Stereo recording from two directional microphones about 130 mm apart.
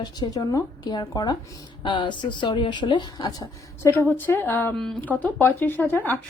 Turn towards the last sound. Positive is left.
turn(degrees=15)  # may be behind; listen again after turning